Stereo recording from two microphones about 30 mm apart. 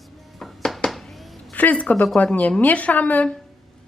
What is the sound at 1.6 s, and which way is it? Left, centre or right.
A woman's voice, left.